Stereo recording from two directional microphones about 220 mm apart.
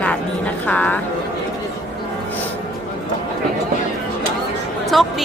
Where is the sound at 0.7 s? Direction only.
5° left (ahead or behind).